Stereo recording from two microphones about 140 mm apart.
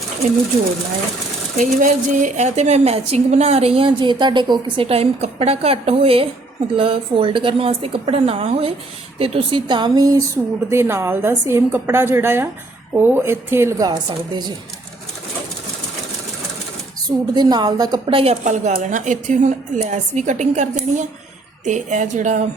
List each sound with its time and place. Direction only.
1.5 s a woman's voice: 70° right (ahead or behind); by 14.5 s 30° right (ahead or behind)
17.3 s speech: 30° right (ahead or behind)
18.4 s speech: 60° right (ahead or behind)